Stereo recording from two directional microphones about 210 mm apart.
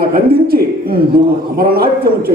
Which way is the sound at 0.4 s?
45° right (ahead or behind).